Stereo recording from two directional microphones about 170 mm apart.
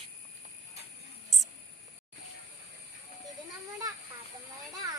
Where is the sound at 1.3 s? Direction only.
Centre (ahead or behind).